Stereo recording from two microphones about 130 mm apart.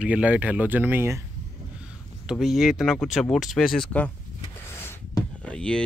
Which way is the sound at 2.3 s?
Centre (ahead or behind).